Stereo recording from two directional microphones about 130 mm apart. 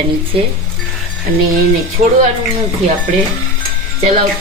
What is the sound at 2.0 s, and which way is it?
Speech, 70° right (ahead or behind).